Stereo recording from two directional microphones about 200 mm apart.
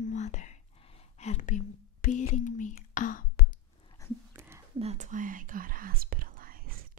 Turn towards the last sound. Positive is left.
turn(degrees=-45)  # may be behind; listen again after turning